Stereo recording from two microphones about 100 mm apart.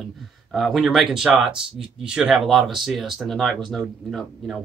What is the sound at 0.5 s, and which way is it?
Speech, centre (ahead or behind).